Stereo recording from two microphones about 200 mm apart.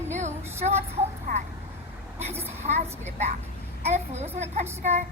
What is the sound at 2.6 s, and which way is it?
A woman's voice, 35° right (ahead or behind).